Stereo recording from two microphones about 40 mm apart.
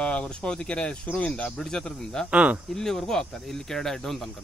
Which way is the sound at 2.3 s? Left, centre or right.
Right.